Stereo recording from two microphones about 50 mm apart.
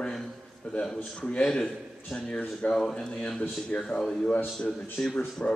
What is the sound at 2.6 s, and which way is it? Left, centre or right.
A man's voice, centre.